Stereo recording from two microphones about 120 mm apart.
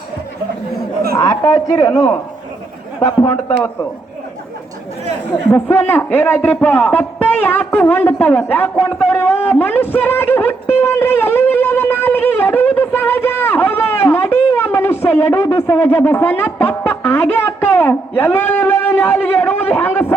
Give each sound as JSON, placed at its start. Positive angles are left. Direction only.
{"t": 1.1, "sound": "a man's voice", "side_deg": 30}
{"t": 3.0, "sound": "speech", "side_deg": 35}
{"t": 5.3, "sound": "a man's voice", "side_deg": 20}
{"t": 10.8, "sound": "a sound", "side_deg": 20}
{"t": 15.5, "sound": "speech", "side_deg": 20}